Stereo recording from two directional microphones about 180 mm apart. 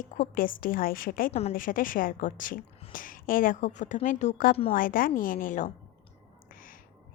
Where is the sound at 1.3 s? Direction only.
35° left (ahead or behind).